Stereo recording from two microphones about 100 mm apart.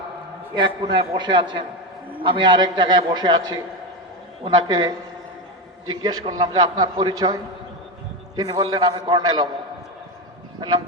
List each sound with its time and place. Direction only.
0.5 s a man's voice: 55° right (ahead or behind)
8.4 s a man's voice: 40° right (ahead or behind)